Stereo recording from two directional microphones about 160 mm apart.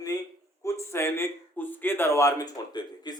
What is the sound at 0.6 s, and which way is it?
A man's voice, 15° left (ahead or behind).